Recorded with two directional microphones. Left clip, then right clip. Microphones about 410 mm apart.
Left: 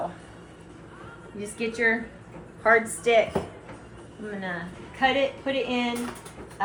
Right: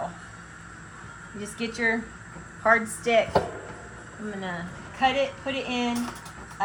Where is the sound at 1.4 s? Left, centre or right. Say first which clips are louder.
Left 2 dB; right.